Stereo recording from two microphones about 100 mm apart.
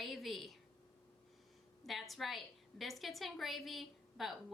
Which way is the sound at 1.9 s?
Centre (ahead or behind).